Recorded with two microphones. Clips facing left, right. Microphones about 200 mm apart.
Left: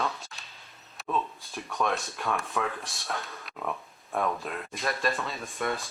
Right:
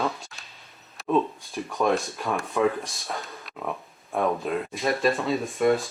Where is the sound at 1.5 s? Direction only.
Centre (ahead or behind).